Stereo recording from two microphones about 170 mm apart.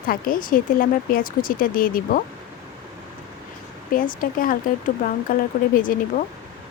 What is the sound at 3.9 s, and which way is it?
Speech, 55° left (ahead or behind).